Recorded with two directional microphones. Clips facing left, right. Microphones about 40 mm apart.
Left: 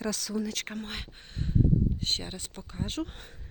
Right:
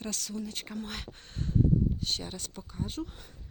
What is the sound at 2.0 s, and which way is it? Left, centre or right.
Speech, left.